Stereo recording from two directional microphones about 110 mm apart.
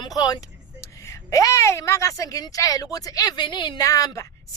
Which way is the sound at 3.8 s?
30° left (ahead or behind).